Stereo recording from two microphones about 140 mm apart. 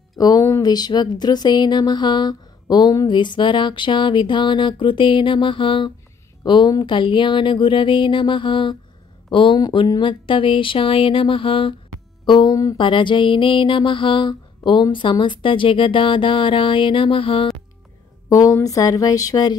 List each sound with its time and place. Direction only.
0.1 s speech: 25° left (ahead or behind)
18.3 s speech: 25° left (ahead or behind)